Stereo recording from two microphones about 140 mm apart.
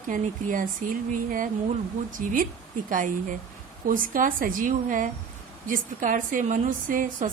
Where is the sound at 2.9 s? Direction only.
70° right (ahead or behind).